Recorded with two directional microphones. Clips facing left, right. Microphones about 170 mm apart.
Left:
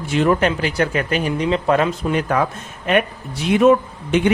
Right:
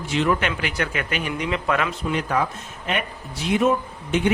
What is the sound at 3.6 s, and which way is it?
Speech, 75° left (ahead or behind).